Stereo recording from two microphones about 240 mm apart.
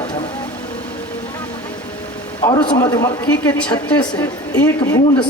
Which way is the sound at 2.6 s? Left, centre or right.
Centre.